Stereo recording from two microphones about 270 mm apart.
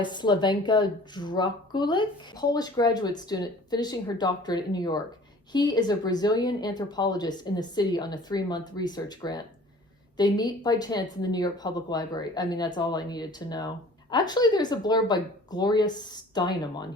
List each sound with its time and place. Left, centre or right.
0.0 s a woman's voice: centre